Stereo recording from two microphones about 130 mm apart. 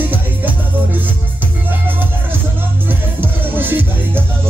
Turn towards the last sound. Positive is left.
turn(degrees=-15)  # may be behind; listen again after turning